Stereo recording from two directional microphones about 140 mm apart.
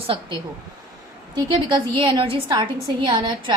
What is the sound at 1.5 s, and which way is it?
A woman's voice, 35° right (ahead or behind).